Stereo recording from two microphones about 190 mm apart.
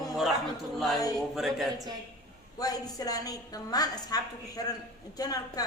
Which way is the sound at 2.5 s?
20° left (ahead or behind).